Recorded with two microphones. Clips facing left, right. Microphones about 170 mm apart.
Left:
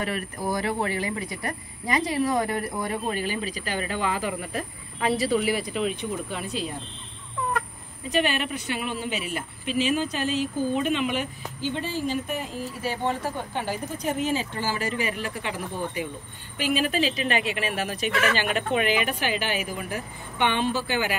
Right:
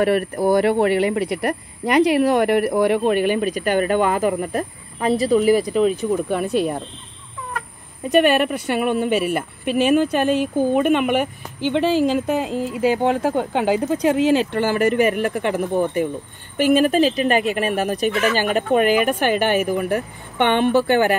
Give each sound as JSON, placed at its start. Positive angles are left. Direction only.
{"t": 0.0, "sound": "speech", "side_deg": -65}
{"t": 6.2, "sound": "speech", "side_deg": -55}
{"t": 8.1, "sound": "speech", "side_deg": -55}
{"t": 13.0, "sound": "speech", "side_deg": -70}